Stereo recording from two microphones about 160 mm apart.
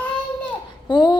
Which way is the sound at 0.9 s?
30° left (ahead or behind).